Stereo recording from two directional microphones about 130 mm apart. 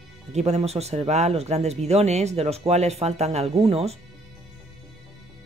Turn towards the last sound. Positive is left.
turn(degrees=-50)  # may be behind; listen again after turning